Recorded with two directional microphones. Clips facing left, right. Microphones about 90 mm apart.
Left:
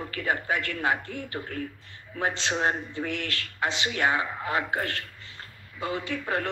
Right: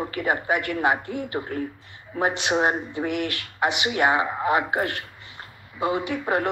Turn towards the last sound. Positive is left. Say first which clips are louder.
# right 5 dB
turn(degrees=-20)  # may be behind; listen again after turning